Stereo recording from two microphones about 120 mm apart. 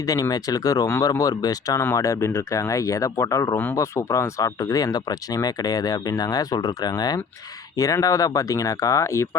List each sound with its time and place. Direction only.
0.0 s speech: 30° left (ahead or behind)